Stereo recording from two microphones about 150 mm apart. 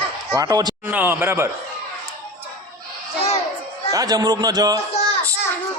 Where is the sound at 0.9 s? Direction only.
10° right (ahead or behind).